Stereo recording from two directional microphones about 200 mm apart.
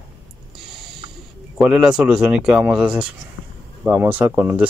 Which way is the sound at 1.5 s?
5° right (ahead or behind).